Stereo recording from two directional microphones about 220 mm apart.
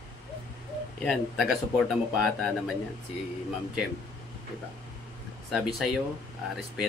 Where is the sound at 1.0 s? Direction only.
Centre (ahead or behind).